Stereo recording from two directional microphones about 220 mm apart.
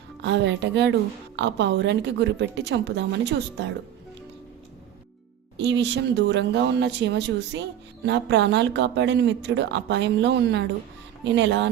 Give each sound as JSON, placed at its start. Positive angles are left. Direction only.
{"t": 0.2, "sound": "speech", "side_deg": -55}
{"t": 5.5, "sound": "speech", "side_deg": -55}